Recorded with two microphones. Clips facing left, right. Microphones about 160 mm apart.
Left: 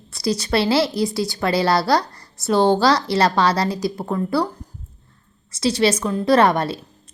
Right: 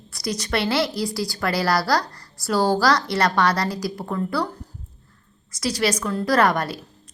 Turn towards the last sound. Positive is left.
turn(degrees=25)  # may be behind; listen again after turning